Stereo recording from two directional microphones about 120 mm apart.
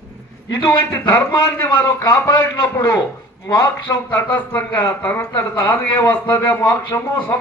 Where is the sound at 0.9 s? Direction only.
20° left (ahead or behind).